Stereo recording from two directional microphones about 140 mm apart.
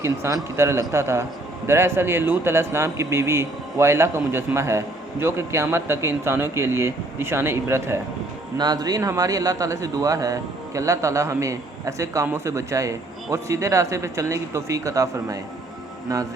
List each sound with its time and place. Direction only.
0.0 s a man's voice: 20° right (ahead or behind)
8.5 s a man's voice: 30° right (ahead or behind)